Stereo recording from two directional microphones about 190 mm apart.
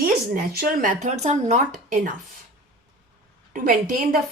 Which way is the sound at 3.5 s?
45° right (ahead or behind).